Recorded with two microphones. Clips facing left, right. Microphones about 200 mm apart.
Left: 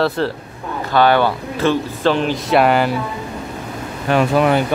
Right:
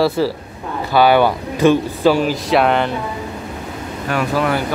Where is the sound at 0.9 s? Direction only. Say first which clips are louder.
Right 2 dB; 10° right (ahead or behind).